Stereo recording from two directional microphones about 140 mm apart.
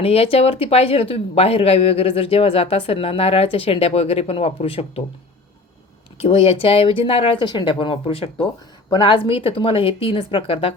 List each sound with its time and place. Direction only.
0.0 s speech: 45° left (ahead or behind)
6.1 s speech: 45° left (ahead or behind)